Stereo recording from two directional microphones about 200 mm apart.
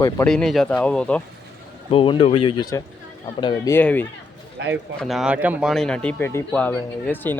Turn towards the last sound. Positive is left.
turn(degrees=10)  # may be behind; listen again after turning